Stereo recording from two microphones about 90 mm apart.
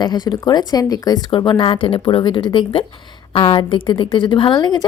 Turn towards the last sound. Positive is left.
turn(degrees=55)  # may be behind; listen again after turning